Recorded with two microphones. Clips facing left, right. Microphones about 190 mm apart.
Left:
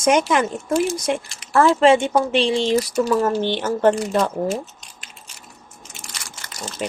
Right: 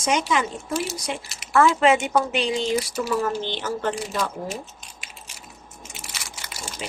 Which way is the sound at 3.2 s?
50° left (ahead or behind).